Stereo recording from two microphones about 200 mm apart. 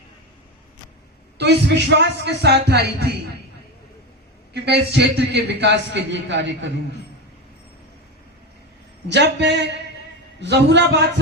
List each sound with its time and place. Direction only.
1.4 s a man's voice: 60° right (ahead or behind)
4.5 s a man's voice: 55° right (ahead or behind)
9.0 s a man's voice: 60° right (ahead or behind)